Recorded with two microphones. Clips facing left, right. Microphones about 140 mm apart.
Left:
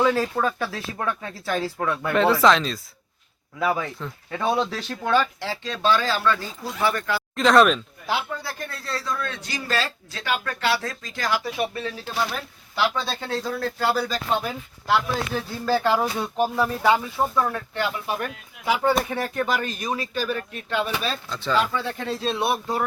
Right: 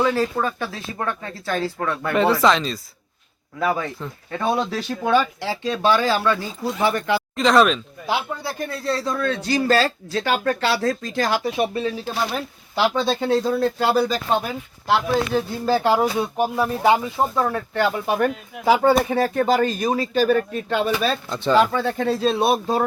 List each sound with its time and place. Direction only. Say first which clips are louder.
0.3 s speech: even; centre (ahead or behind); by 7.2 s 20° right (ahead or behind)
7.3 s speech: even; centre (ahead or behind)
8.4 s speech: right 8 dB; 20° right (ahead or behind)
11.4 s speech: right 5 dB; 20° right (ahead or behind)
17.3 s speech: right 3 dB; 35° right (ahead or behind)
18.6 s speech: right 5 dB; 35° right (ahead or behind)
20.1 s speech: right 12 dB; 50° right (ahead or behind)
20.7 s speech: right 2 dB; 40° right (ahead or behind)
21.2 s speech: right 6 dB; 20° right (ahead or behind)
21.5 s speech: right 6 dB; 45° right (ahead or behind); by 22.8 s 25° right (ahead or behind)